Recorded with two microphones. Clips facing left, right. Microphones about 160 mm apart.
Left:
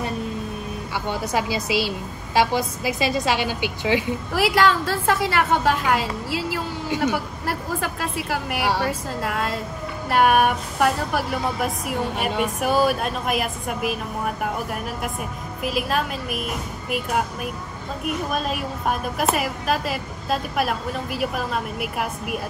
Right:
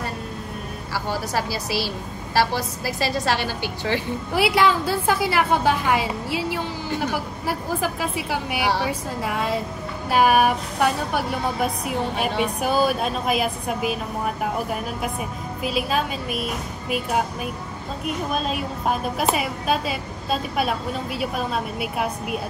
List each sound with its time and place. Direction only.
0.9 s a woman's voice: 20° left (ahead or behind)
4.3 s a woman's voice: centre (ahead or behind)